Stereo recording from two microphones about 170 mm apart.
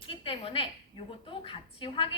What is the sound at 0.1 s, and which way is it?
A woman's voice, 35° left (ahead or behind).